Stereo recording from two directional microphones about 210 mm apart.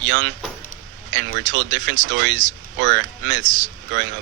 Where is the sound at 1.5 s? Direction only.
65° right (ahead or behind).